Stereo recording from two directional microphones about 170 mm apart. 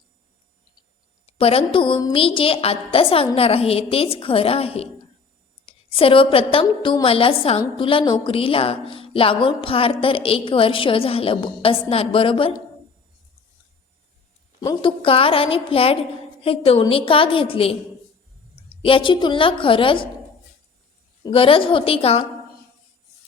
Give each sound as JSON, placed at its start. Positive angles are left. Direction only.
{"t": 1.3, "sound": "a woman's voice", "side_deg": 35}
{"t": 14.6, "sound": "a woman's voice", "side_deg": 25}
{"t": 21.2, "sound": "a woman's voice", "side_deg": 30}